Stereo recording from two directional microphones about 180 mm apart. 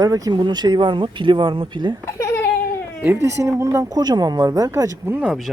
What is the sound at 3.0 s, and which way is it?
Speech, 15° right (ahead or behind).